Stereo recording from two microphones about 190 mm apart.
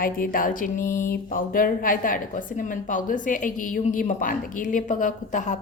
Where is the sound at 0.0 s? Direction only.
45° left (ahead or behind).